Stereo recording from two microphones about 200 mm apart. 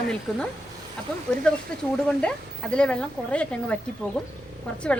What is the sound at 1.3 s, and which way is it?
A woman's voice, 5° left (ahead or behind).